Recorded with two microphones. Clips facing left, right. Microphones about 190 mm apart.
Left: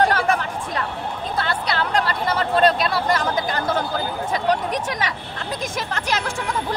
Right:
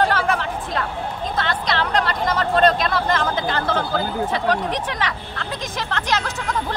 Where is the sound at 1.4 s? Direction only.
10° left (ahead or behind).